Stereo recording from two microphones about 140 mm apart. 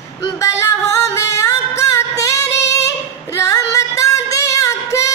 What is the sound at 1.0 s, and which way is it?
Singing, 20° left (ahead or behind).